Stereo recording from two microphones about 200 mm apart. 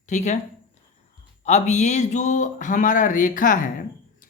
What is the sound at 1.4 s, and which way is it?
Speech, 35° left (ahead or behind).